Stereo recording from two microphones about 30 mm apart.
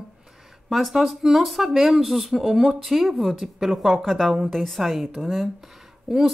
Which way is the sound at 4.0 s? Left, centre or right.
Centre.